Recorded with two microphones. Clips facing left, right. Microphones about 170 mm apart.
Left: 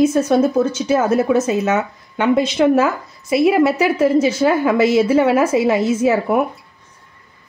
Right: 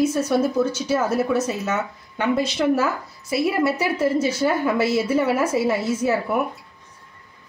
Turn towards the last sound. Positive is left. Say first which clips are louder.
# left 6 dB
turn(degrees=90)